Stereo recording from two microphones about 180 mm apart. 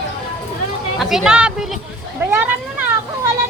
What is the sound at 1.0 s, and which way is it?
Speech, 5° right (ahead or behind).